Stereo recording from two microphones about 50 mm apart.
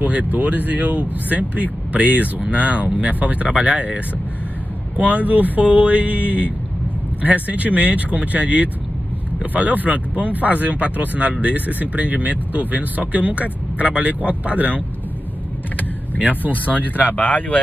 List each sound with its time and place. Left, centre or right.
0.0 s speech: right
16.2 s speech: right
16.6 s speech: left